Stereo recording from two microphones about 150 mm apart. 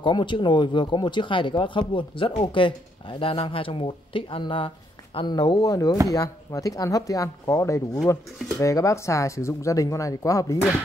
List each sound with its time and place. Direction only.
0.0 s speech: 30° left (ahead or behind)